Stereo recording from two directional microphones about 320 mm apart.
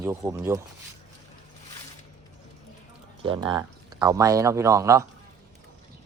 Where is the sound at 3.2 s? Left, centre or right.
Centre.